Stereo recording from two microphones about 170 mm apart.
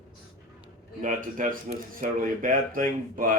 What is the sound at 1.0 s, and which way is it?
Speech, 50° right (ahead or behind).